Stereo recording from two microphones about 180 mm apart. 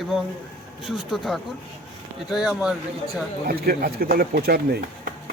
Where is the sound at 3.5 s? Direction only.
55° right (ahead or behind).